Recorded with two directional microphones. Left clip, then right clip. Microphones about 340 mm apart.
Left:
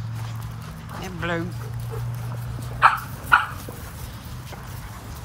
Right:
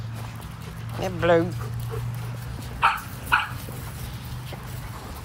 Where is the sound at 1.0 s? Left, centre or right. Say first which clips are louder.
Right 8 dB; centre.